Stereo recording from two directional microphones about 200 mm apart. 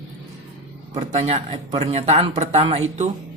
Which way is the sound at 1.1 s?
30° right (ahead or behind).